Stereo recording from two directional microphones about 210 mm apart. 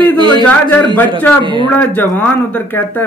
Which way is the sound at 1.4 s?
25° right (ahead or behind).